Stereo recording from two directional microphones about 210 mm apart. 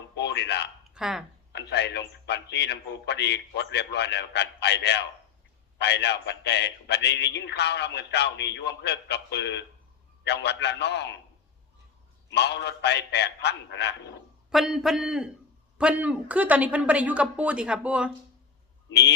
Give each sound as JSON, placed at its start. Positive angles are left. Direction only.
{"t": 0.2, "sound": "a sound", "side_deg": 55}
{"t": 0.9, "sound": "speech", "side_deg": 0}
{"t": 1.5, "sound": "a man's voice", "side_deg": 55}
{"t": 12.3, "sound": "a man's voice", "side_deg": 55}
{"t": 14.5, "sound": "a man's voice", "side_deg": 0}
{"t": 18.9, "sound": "speech", "side_deg": 55}